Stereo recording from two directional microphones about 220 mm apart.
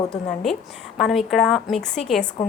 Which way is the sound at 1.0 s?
Centre (ahead or behind).